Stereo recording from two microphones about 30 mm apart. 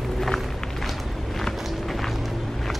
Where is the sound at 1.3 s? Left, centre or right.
Centre.